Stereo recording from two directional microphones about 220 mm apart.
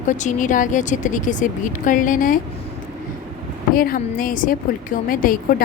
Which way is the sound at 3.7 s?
40° left (ahead or behind).